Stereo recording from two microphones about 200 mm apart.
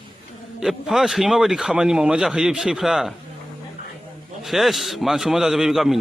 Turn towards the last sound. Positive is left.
turn(degrees=0)  # may be behind; listen again after turning